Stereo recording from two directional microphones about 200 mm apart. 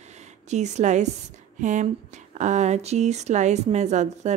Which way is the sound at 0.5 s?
35° right (ahead or behind).